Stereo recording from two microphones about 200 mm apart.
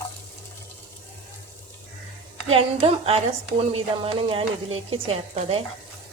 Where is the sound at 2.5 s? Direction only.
30° right (ahead or behind).